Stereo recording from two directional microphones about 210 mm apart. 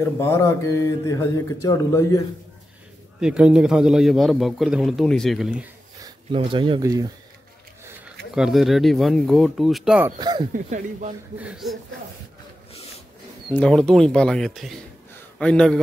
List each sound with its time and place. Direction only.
0.2 s a man's voice: 10° left (ahead or behind)
3.2 s a man's voice: 5° right (ahead or behind)
6.0 s speech: 25° right (ahead or behind)
8.4 s a man's voice: centre (ahead or behind)
10.1 s speech: 20° right (ahead or behind)
10.5 s speech: 35° right (ahead or behind)
11.3 s a man's voice: 5° right (ahead or behind)
13.6 s a man's voice: 5° left (ahead or behind)